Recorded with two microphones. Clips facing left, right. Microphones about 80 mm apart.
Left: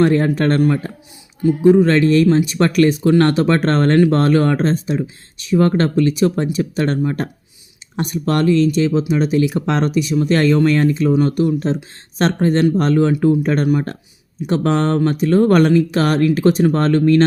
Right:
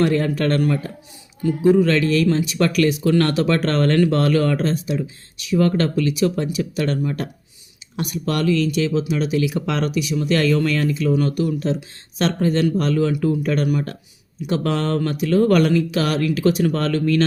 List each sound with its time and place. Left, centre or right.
0.0 s speech: left